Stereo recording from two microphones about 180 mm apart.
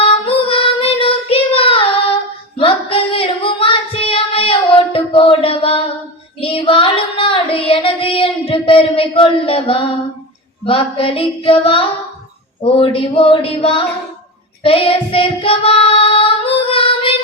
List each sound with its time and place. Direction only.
0.0 s child singing: 30° left (ahead or behind)
2.6 s female singing: 30° left (ahead or behind)
6.4 s child singing: 30° left (ahead or behind)
10.7 s music: 30° left (ahead or behind)
12.6 s speech: 30° left (ahead or behind)
14.6 s child singing: 30° left (ahead or behind)